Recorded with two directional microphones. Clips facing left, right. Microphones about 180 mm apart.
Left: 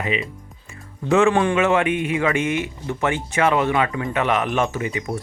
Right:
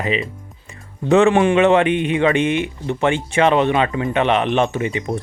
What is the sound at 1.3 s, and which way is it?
Speech, 25° right (ahead or behind).